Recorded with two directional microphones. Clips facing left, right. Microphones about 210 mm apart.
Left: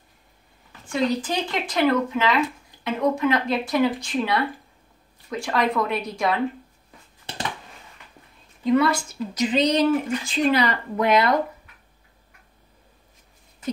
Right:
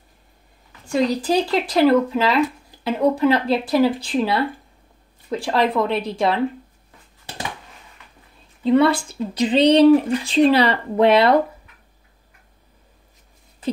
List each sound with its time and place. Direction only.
0.8 s speech: 35° right (ahead or behind)
5.4 s speech: 30° right (ahead or behind)
8.6 s speech: 30° right (ahead or behind)